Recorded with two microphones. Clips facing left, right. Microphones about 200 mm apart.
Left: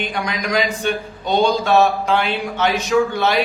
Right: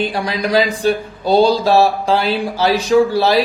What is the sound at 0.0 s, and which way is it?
Speech, 35° right (ahead or behind).